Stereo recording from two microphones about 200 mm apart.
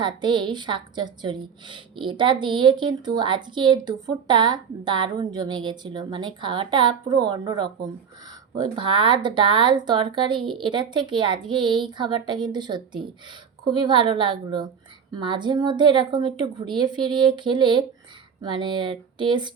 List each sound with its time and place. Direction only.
0.0 s a woman's voice: 25° right (ahead or behind)